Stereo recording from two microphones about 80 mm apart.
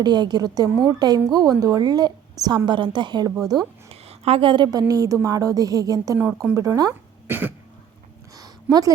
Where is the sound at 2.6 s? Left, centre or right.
Right.